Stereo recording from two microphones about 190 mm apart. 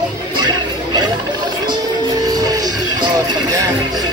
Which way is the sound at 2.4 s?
20° right (ahead or behind).